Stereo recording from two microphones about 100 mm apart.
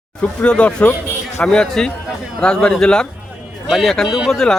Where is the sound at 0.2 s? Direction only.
10° left (ahead or behind).